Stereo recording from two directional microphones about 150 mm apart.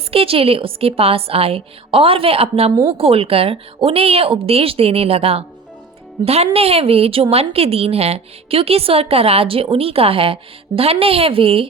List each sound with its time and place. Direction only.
0.1 s a woman's voice: 40° right (ahead or behind)